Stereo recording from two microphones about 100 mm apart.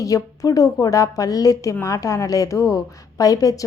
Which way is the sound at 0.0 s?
35° left (ahead or behind).